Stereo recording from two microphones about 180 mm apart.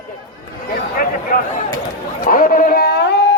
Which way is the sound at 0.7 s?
50° left (ahead or behind).